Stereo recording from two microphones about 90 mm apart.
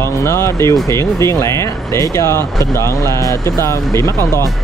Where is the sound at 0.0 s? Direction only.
30° left (ahead or behind).